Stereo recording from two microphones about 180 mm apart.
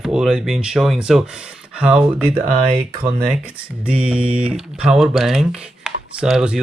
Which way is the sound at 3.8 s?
5° right (ahead or behind).